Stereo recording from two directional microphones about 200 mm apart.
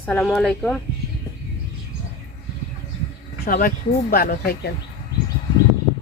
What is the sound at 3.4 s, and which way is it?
Speech, 45° left (ahead or behind).